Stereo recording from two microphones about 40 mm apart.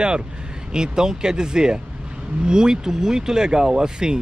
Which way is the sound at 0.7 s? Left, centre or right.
Centre.